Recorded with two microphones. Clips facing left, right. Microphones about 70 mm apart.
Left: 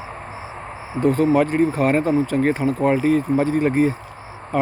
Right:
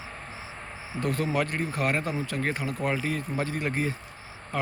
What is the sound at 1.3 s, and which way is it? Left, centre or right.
Speech, centre.